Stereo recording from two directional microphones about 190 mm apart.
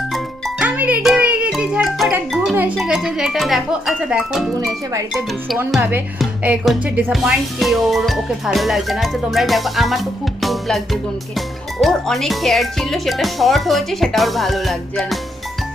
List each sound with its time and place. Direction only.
0.1 s music: 5° right (ahead or behind)
4.6 s speech: 15° right (ahead or behind)
5.7 s speech: 5° right (ahead or behind)